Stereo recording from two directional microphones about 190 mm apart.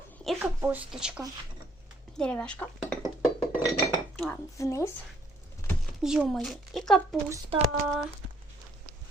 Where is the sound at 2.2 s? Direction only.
5° left (ahead or behind).